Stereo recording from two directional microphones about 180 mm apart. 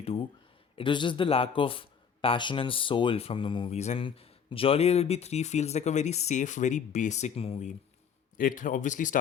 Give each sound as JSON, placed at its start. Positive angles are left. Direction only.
{"t": 0.0, "sound": "a sound", "side_deg": 30}
{"t": 0.8, "sound": "a man's voice", "side_deg": 25}
{"t": 8.4, "sound": "speech", "side_deg": 50}